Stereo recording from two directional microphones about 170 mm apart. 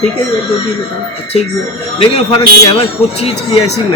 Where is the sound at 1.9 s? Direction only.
25° left (ahead or behind).